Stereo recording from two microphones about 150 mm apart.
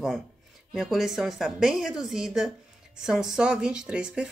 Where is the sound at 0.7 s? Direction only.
Centre (ahead or behind).